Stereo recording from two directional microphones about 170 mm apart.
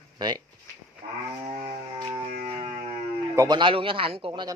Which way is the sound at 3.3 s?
20° right (ahead or behind).